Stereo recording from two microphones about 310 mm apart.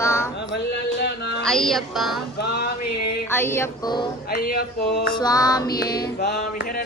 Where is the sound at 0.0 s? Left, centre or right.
Centre.